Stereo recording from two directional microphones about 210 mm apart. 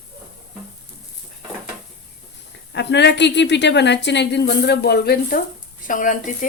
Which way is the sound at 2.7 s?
55° left (ahead or behind).